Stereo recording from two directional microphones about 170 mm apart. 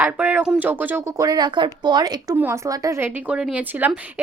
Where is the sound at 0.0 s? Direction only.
10° right (ahead or behind).